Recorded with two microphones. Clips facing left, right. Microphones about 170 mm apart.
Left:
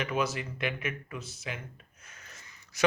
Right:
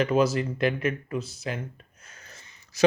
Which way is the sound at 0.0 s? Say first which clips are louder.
Right 9 dB; 35° right (ahead or behind).